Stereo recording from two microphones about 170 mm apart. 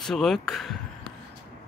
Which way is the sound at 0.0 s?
Centre (ahead or behind).